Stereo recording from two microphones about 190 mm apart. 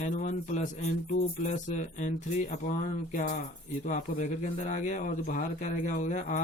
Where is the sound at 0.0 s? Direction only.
40° left (ahead or behind).